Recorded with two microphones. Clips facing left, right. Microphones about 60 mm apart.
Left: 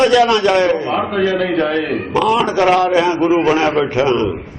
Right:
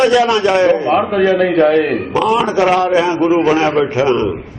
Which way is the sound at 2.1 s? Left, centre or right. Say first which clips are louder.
Even; centre.